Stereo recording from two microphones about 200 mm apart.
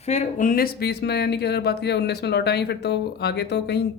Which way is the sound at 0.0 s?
35° left (ahead or behind).